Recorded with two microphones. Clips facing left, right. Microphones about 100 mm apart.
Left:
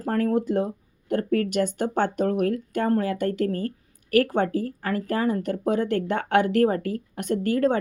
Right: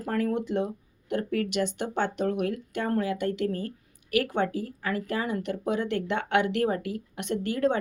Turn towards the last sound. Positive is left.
turn(degrees=45)  # may be behind; listen again after turning